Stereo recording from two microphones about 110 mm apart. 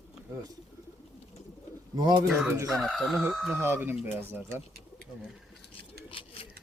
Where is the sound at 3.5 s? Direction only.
20° right (ahead or behind).